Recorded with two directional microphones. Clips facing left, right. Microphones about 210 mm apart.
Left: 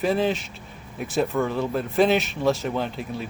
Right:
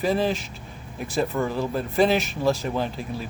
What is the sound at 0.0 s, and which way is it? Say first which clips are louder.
Speech: left 1 dB; centre (ahead or behind).